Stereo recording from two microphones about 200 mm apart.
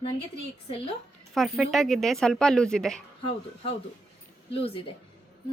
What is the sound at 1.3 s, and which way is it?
A woman's voice, centre (ahead or behind).